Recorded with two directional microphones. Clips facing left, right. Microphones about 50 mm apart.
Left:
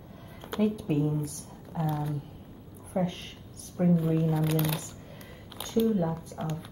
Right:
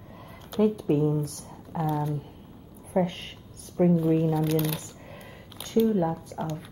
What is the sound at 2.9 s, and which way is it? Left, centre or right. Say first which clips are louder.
Speech: right 4 dB; right.